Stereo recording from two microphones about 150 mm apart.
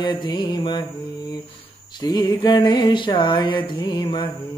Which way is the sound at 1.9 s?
30° left (ahead or behind).